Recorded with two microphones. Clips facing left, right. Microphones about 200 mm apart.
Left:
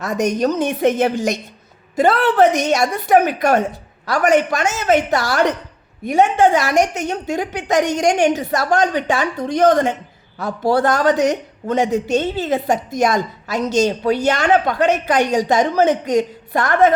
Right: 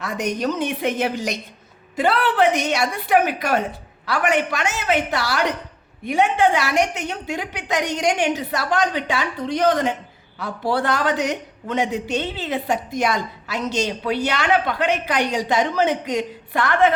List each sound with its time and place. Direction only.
0.0 s speech: 45° left (ahead or behind)